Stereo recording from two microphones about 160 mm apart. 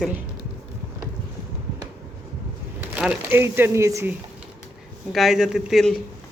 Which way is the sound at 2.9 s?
10° right (ahead or behind).